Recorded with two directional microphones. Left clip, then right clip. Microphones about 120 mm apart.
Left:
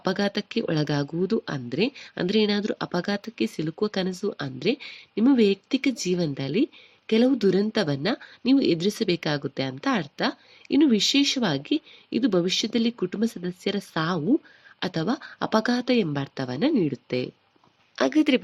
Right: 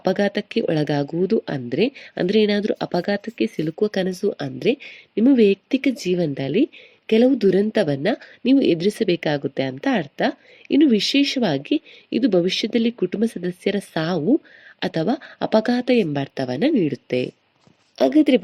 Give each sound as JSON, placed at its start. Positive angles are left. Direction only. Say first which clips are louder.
{"t": 0.0, "sound": "speech", "louder": "right 6 dB", "side_deg": -15}